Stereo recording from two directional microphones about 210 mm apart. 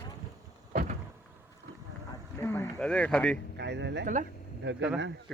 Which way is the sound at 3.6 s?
55° right (ahead or behind).